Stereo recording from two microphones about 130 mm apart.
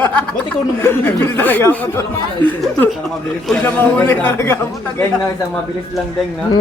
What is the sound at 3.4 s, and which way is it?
A man's voice, 10° left (ahead or behind).